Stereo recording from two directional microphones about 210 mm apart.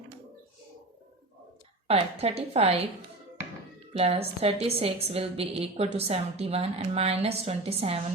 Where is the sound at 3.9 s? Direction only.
30° right (ahead or behind).